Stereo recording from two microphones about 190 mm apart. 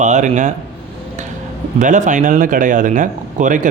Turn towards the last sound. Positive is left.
turn(degrees=-45)  # may be behind; listen again after turning